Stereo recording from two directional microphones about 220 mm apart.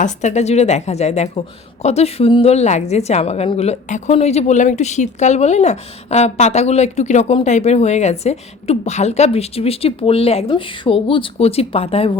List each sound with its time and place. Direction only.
0.0 s a woman's voice: 30° left (ahead or behind)